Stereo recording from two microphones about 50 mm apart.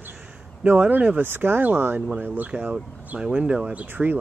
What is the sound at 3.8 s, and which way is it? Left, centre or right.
Speech, right.